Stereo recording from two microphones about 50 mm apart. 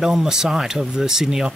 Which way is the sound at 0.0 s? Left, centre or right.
Centre.